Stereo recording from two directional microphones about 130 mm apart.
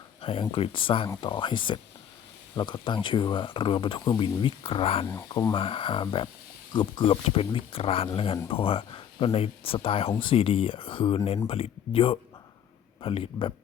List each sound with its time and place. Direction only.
0.2 s speech: 45° left (ahead or behind)
5.0 s speech: 30° left (ahead or behind)
5.5 s speech: 45° left (ahead or behind)